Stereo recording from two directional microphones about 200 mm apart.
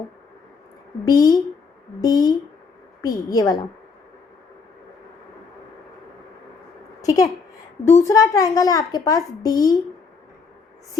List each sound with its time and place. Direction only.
1.0 s a woman's voice: 20° left (ahead or behind)
7.0 s a woman's voice: 15° left (ahead or behind)